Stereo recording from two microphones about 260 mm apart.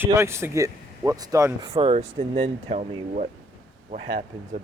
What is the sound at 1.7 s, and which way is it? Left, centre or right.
Speech, right.